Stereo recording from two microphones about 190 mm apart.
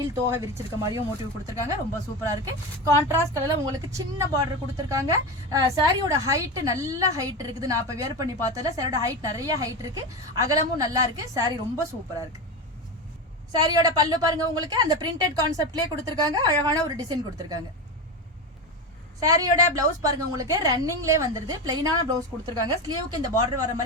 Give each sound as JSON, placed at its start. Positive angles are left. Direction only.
{"t": 0.0, "sound": "a woman's voice", "side_deg": -15}
{"t": 2.4, "sound": "a woman's voice", "side_deg": -15}
{"t": 13.5, "sound": "a woman's voice", "side_deg": -20}
{"t": 19.2, "sound": "a woman's voice", "side_deg": -20}